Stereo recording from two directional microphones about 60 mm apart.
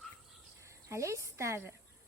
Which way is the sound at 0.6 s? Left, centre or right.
Right.